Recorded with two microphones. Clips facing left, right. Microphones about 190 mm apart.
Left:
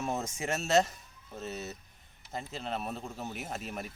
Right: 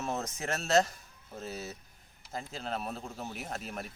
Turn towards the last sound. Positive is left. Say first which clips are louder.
# left 1 dB
turn(degrees=0)  # may be behind; listen again after turning